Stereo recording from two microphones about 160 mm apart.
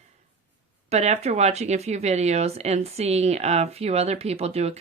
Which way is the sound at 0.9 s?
45° right (ahead or behind).